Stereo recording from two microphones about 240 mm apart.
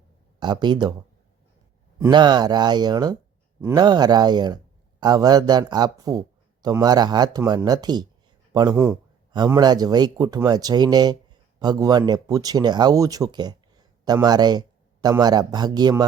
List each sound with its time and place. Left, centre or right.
0.4 s speech: centre
2.0 s speech: centre